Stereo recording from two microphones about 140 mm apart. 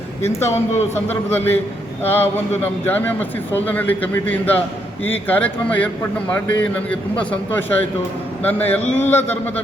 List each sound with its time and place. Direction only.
0.2 s speech: 15° left (ahead or behind)
8.8 s speech: 55° left (ahead or behind)